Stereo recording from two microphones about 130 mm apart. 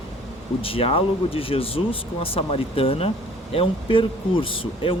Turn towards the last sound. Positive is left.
turn(degrees=45)  # may be behind; listen again after turning